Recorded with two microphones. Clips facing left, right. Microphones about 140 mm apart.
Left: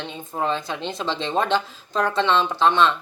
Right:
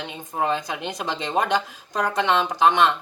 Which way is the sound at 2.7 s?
15° right (ahead or behind).